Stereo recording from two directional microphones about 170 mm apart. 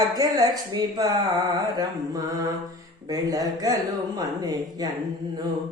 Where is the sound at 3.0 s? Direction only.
20° right (ahead or behind).